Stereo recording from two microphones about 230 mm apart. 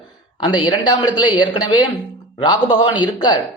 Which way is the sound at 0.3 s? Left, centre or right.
Centre.